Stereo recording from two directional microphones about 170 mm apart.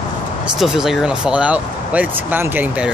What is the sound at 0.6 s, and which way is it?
Speech, 5° right (ahead or behind).